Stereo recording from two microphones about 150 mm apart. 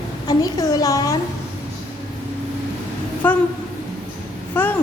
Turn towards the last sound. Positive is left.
turn(degrees=10)  # may be behind; listen again after turning